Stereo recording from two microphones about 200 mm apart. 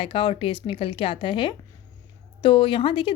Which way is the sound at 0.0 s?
25° left (ahead or behind).